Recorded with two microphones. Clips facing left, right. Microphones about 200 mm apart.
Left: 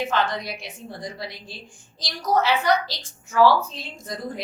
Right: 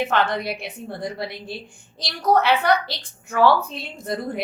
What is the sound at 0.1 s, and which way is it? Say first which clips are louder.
A woman's voice: right 3 dB; 60° right (ahead or behind).